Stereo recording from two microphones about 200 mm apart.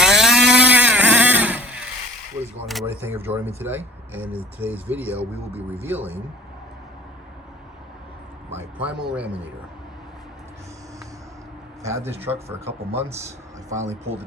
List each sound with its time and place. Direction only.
0.0 s vehicle: centre (ahead or behind)
2.6 s a sound: centre (ahead or behind)
2.8 s speech: 10° right (ahead or behind)
8.5 s speech: 5° right (ahead or behind)
11.8 s speech: 15° right (ahead or behind)
12.6 s speech: 30° right (ahead or behind)